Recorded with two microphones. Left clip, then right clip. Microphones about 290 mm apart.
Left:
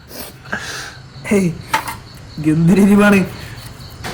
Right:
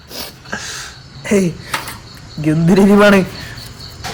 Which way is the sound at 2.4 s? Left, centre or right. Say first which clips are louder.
Right 2 dB; right.